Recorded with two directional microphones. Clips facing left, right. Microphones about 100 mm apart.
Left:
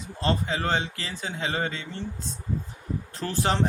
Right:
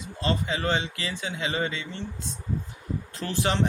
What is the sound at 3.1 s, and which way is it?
Speech, 35° left (ahead or behind).